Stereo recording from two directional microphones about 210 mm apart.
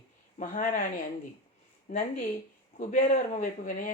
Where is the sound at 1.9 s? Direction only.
40° left (ahead or behind).